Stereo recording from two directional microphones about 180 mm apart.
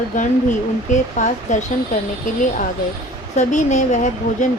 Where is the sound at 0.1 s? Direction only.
45° left (ahead or behind).